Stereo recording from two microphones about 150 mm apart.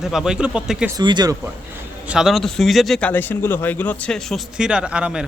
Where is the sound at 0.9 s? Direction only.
25° right (ahead or behind).